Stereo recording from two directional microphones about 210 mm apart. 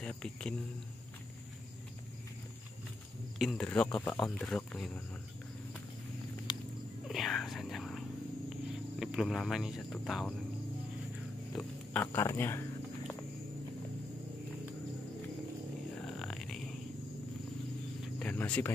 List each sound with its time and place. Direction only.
0.0 s speech: 5° left (ahead or behind)
3.3 s speech: centre (ahead or behind)
6.5 s cat: 20° left (ahead or behind)
7.1 s whispering: centre (ahead or behind)
9.0 s speech: centre (ahead or behind)
11.5 s speech: 10° left (ahead or behind)
16.1 s a sound: centre (ahead or behind)
18.0 s speech: 5° left (ahead or behind)